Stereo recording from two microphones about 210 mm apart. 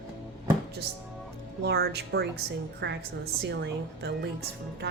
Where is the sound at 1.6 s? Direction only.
50° right (ahead or behind).